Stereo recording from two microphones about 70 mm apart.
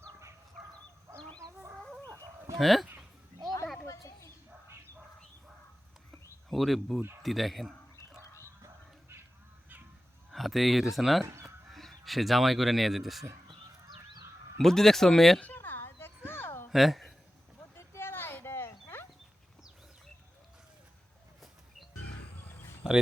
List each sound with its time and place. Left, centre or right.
2.6 s speech: centre
3.8 s a sound: left
6.5 s speech: centre
10.3 s speech: centre
11.3 s chicken: right
11.7 s speech: centre
14.6 s speech: centre
15.4 s a sound: left
16.6 s speech: centre
17.7 s a sound: left